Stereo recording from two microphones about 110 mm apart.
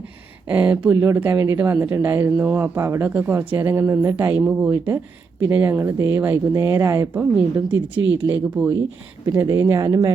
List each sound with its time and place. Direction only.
0.4 s speech: 15° right (ahead or behind)
0.9 s speech: 25° right (ahead or behind)
7.7 s speech: 15° right (ahead or behind)
9.2 s speech: 30° right (ahead or behind)